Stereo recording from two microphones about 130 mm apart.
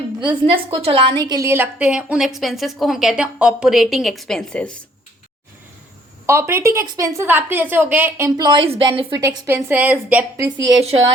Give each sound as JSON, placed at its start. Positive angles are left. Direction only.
{"t": 0.2, "sound": "a woman's voice", "side_deg": -40}
{"t": 1.5, "sound": "a woman's voice", "side_deg": -15}
{"t": 6.2, "sound": "a woman's voice", "side_deg": -20}
{"t": 8.4, "sound": "a woman's voice", "side_deg": -35}
{"t": 9.2, "sound": "a woman's voice", "side_deg": -20}
{"t": 10.3, "sound": "a woman's voice", "side_deg": -30}